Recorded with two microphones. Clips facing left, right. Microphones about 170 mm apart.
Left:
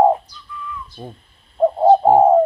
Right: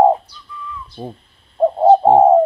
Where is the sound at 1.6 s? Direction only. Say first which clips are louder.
Right 1 dB; 5° right (ahead or behind).